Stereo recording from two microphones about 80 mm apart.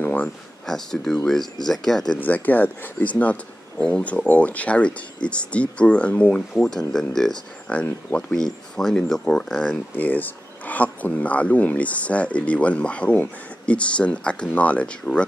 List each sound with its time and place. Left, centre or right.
0.0 s a sound: centre
0.7 s speech: centre
2.1 s speech: left; by 7.3 s centre
7.7 s speech: centre
9.9 s speech: left